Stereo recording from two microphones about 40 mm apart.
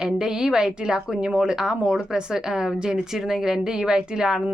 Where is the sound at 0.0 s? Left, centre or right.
Centre.